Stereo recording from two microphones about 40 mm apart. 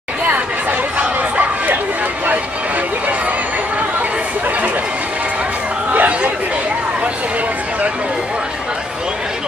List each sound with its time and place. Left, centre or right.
5.9 s chatter: right